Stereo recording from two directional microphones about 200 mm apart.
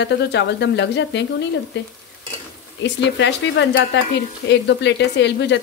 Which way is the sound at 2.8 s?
60° left (ahead or behind).